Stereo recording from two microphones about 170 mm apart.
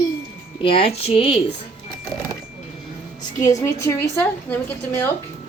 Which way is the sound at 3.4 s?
20° left (ahead or behind).